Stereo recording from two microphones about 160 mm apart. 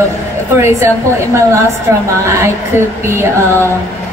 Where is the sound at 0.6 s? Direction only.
15° right (ahead or behind).